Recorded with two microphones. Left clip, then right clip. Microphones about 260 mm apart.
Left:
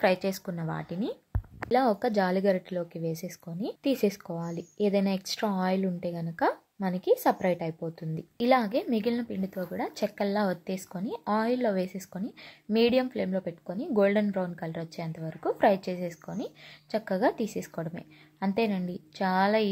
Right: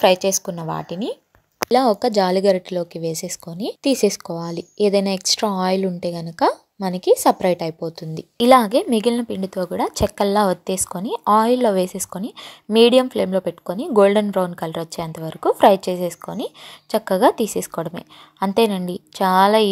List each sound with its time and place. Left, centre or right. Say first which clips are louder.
0.0 s speech: right 11 dB; right